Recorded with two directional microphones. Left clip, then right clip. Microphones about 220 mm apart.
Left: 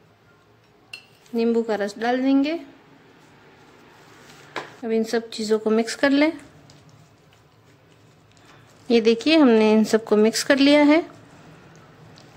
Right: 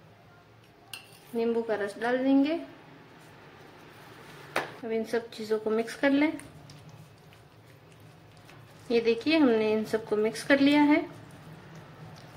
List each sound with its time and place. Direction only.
1.3 s speech: 45° left (ahead or behind)
4.8 s speech: 50° left (ahead or behind)
8.8 s speech: 50° left (ahead or behind)